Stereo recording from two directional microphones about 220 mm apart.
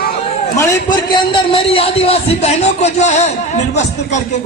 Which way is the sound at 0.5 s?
15° left (ahead or behind).